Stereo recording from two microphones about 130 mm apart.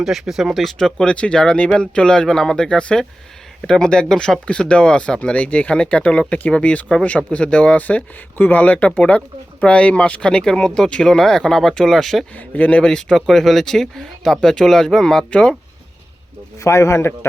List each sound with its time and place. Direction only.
0.0 s speech: centre (ahead or behind)
16.6 s a man's voice: 20° left (ahead or behind)